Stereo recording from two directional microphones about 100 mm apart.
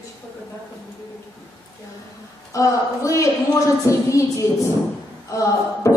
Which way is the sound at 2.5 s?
30° left (ahead or behind).